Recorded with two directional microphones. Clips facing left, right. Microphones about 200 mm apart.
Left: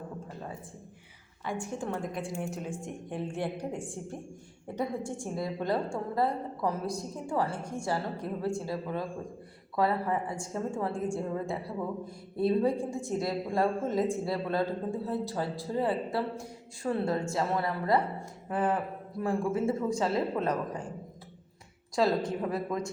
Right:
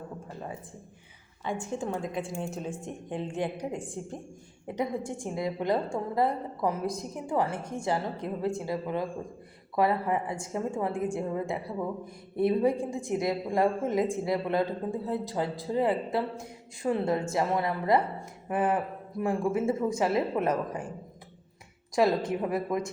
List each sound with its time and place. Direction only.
1.5 s a woman's voice: 25° right (ahead or behind)
22.0 s a man's voice: 15° right (ahead or behind)